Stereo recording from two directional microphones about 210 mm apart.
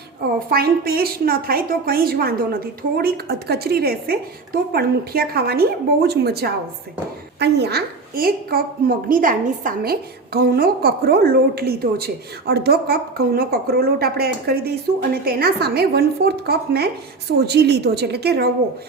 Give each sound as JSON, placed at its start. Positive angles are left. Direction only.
{"t": 0.5, "sound": "a woman's voice", "side_deg": -45}